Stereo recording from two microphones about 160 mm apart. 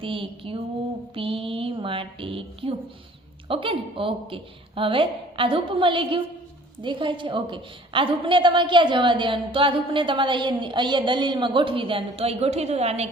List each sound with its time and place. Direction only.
0.0 s a woman's voice: 35° right (ahead or behind)